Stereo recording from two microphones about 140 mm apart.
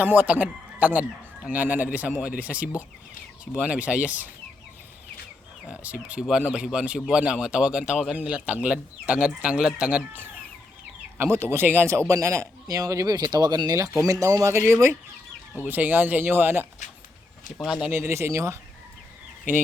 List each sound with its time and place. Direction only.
0.0 s speech: 10° right (ahead or behind)
5.6 s speech: 10° right (ahead or behind)
11.2 s speech: 20° right (ahead or behind)
17.6 s speech: 5° right (ahead or behind)
17.9 s speech: 20° right (ahead or behind)